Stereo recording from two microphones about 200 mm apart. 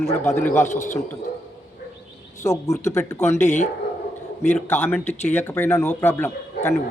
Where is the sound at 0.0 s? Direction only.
10° left (ahead or behind).